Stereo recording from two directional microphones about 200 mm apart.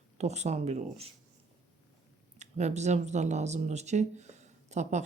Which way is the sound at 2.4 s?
35° right (ahead or behind).